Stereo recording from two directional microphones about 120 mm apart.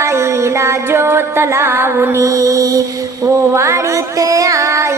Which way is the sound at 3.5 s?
25° right (ahead or behind).